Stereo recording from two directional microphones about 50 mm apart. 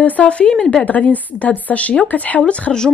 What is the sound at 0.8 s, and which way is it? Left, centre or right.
Speech, left.